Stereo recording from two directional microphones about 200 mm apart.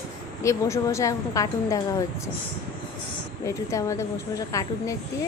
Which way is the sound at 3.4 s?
15° left (ahead or behind).